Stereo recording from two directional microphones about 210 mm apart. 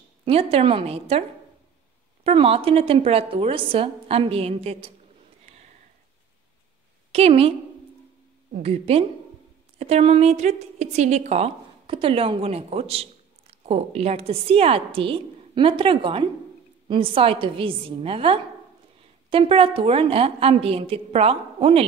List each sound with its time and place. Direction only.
0.2 s a woman's voice: 25° right (ahead or behind)
2.2 s a woman's voice: 30° right (ahead or behind)
7.1 s a woman's voice: 30° right (ahead or behind)
8.6 s a woman's voice: 30° right (ahead or behind)